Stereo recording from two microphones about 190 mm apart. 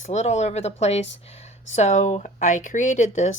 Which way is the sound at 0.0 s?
35° left (ahead or behind).